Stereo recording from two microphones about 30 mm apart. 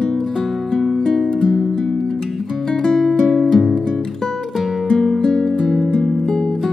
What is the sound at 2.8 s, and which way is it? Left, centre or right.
Music, centre.